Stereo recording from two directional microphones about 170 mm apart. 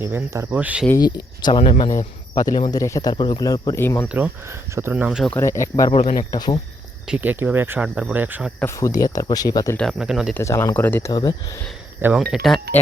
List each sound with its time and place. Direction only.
0.0 s speech: 15° right (ahead or behind)
0.9 s speech: 25° left (ahead or behind)
4.7 s speech: 15° right (ahead or behind)
5.3 s speech: 15° left (ahead or behind)
5.9 s speech: 40° left (ahead or behind)
6.3 s speech: 25° left (ahead or behind)
7.1 s speech: 10° right (ahead or behind)
8.6 s speech: 20° left (ahead or behind)
9.7 s speech: centre (ahead or behind)
10.3 s speech: 15° left (ahead or behind)
11.1 s speech: 20° left (ahead or behind)
12.3 s speech: centre (ahead or behind)